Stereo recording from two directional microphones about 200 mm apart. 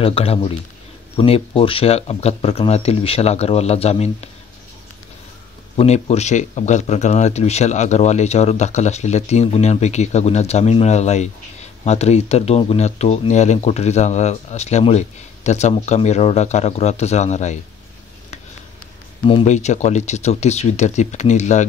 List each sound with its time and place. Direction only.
0.0 s speech: 30° left (ahead or behind)
5.8 s speech: 30° left (ahead or behind)
19.2 s speech: 30° left (ahead or behind)